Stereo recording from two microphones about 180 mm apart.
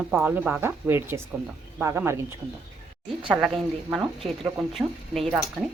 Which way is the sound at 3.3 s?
5° right (ahead or behind).